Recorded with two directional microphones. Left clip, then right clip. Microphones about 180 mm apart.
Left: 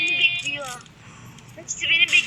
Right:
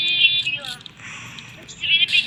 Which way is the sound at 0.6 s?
35° left (ahead or behind).